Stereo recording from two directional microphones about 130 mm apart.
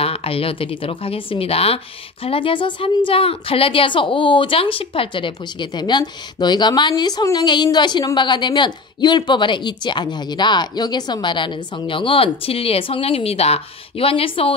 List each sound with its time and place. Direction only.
0.0 s a woman's voice: 50° left (ahead or behind)